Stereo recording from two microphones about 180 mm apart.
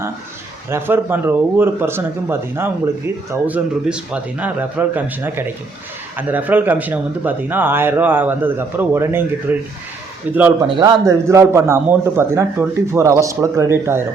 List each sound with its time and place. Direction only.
0.7 s speech: 10° right (ahead or behind)
10.7 s speech: 25° right (ahead or behind)